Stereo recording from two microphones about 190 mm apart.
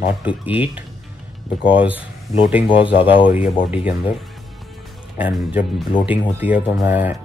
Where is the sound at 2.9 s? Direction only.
25° left (ahead or behind).